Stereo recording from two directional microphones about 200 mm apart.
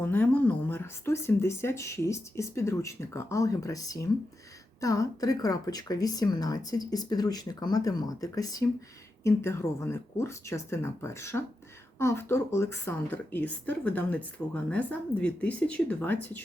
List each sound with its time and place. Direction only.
0.0 s speech: 10° left (ahead or behind)